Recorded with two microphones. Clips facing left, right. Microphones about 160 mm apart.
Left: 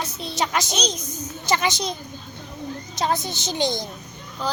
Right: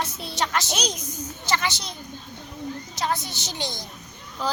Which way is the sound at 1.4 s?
15° left (ahead or behind).